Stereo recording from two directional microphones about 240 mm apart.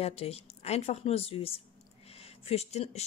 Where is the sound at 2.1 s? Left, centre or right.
Left.